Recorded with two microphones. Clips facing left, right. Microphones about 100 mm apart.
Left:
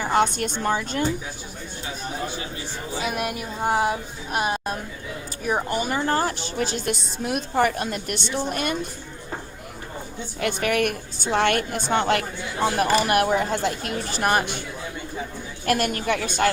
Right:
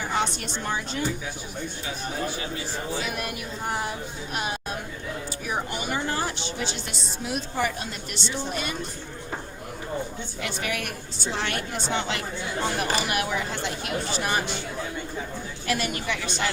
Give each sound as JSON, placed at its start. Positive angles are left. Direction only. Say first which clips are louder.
{"t": 0.0, "sound": "a woman's voice", "louder": "left 6 dB", "side_deg": 55}
{"t": 3.1, "sound": "a woman's voice", "louder": "left 4 dB", "side_deg": 50}
{"t": 10.4, "sound": "a woman's voice", "louder": "left 9 dB", "side_deg": 55}
{"t": 15.6, "sound": "a woman's voice", "louder": "left 5 dB", "side_deg": 50}